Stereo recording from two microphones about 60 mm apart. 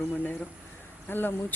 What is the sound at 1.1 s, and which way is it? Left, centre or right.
Speech, left.